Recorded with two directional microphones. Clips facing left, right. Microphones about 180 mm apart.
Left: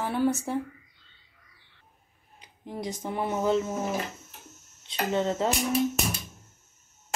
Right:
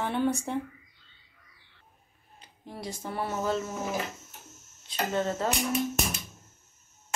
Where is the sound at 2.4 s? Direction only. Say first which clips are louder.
Left 4 dB; 15° left (ahead or behind).